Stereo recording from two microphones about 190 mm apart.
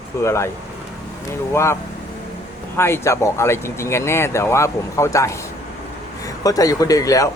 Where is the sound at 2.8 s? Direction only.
15° left (ahead or behind).